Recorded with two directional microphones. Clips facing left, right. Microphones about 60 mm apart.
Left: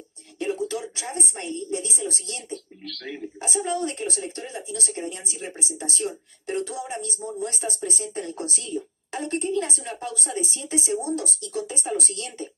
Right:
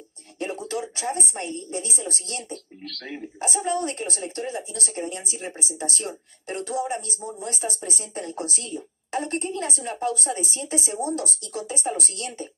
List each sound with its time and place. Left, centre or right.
0.4 s a woman's voice: right
7.6 s speech: centre
8.0 s a woman's voice: right